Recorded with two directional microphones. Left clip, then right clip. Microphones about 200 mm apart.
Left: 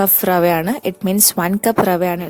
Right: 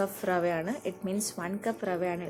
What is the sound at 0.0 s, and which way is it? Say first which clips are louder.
A woman's voice: left 14 dB; 55° left (ahead or behind).